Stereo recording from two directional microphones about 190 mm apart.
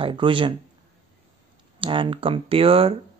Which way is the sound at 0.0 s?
25° right (ahead or behind).